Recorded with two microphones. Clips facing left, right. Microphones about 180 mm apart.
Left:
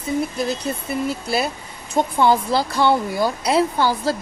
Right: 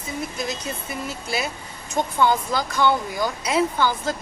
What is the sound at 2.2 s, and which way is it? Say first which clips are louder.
Speech: left 3 dB; 30° left (ahead or behind).